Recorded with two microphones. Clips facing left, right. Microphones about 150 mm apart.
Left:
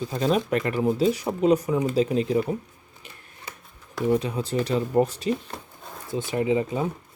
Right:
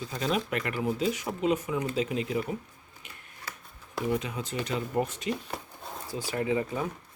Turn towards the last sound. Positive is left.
turn(degrees=20)  # may be behind; listen again after turning